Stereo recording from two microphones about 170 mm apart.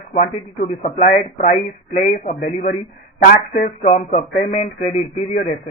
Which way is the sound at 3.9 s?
40° left (ahead or behind).